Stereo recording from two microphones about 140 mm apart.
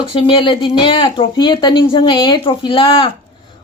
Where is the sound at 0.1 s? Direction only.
40° left (ahead or behind).